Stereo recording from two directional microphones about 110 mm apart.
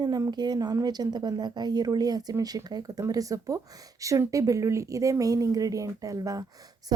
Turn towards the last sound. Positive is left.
turn(degrees=-35)  # may be behind; listen again after turning